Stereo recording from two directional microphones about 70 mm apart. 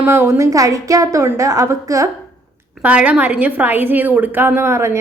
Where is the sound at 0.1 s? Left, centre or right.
Right.